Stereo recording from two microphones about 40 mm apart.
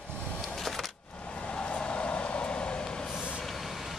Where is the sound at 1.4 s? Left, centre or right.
Left.